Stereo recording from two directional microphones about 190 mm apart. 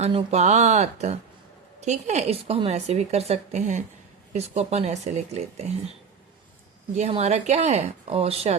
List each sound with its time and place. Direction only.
0.0 s speech: 35° right (ahead or behind)